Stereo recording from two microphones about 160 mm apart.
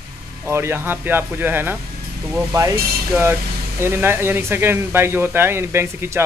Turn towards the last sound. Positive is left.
turn(degrees=-15)  # may be behind; listen again after turning